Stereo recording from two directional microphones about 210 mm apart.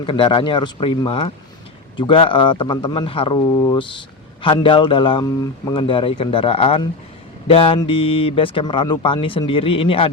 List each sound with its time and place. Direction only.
0.0 s speech: 25° left (ahead or behind)